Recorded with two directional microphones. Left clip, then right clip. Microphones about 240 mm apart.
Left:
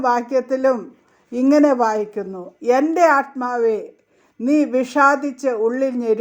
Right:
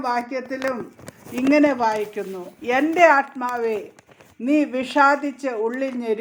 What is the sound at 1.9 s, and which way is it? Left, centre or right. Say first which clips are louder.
Speech: left 2 dB; left.